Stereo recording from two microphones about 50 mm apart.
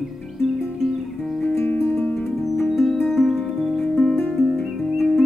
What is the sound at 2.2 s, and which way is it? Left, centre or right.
Music, centre.